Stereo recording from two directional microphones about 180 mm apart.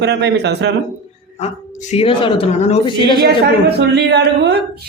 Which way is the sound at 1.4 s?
35° left (ahead or behind).